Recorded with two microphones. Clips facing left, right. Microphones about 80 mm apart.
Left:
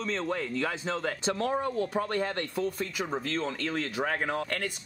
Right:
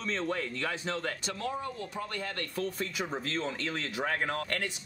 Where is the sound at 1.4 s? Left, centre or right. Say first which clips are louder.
Left 7 dB; left.